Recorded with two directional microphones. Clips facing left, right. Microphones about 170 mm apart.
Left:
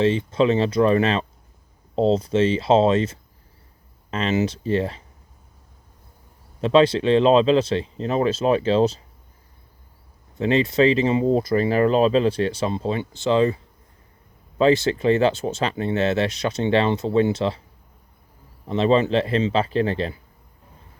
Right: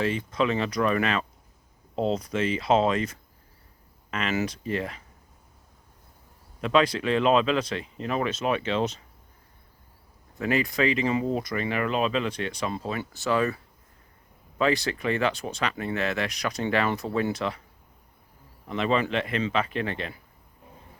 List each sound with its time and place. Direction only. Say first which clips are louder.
0.0 s speech: left 7 dB; 25° left (ahead or behind)
6.6 s speech: left 6 dB; 30° left (ahead or behind)
10.3 s speech: left 7 dB; 25° left (ahead or behind)
14.6 s speech: left 7 dB; 25° left (ahead or behind)
18.7 s a man's voice: left 7 dB; 30° left (ahead or behind)